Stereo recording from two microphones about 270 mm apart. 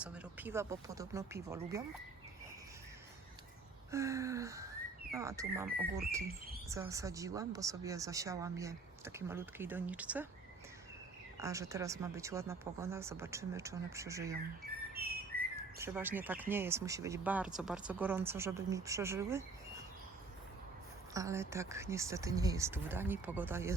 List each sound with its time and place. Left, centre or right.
0.0 s speech: centre
3.9 s speech: centre
5.6 s a sound: right
6.7 s speech: centre
11.3 s speech: centre
14.9 s whistling: right
15.8 s speech: centre
21.1 s speech: centre